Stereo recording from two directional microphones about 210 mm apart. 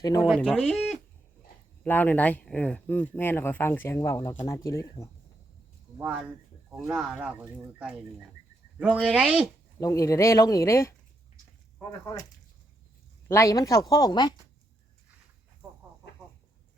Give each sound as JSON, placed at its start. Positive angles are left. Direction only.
{"t": 0.3, "sound": "speech", "side_deg": 5}
{"t": 6.7, "sound": "speech", "side_deg": -5}
{"t": 9.8, "sound": "speech", "side_deg": 15}
{"t": 13.2, "sound": "speech", "side_deg": 15}